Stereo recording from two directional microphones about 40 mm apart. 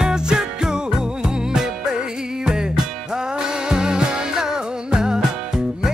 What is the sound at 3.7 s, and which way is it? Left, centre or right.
Music, centre.